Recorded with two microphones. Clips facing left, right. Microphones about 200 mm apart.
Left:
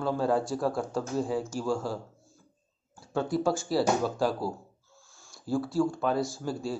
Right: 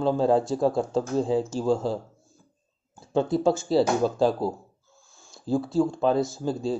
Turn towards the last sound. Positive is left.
turn(degrees=-20)  # may be behind; listen again after turning